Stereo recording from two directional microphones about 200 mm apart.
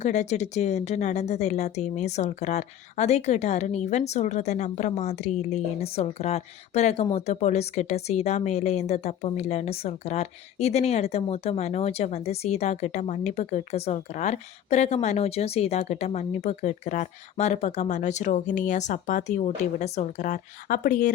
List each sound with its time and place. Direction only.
0.0 s a woman's voice: 35° left (ahead or behind)